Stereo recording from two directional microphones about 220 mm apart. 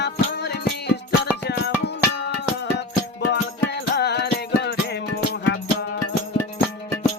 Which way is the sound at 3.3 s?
50° left (ahead or behind).